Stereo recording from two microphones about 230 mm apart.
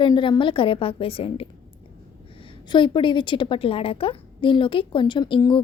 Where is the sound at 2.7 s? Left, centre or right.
Left.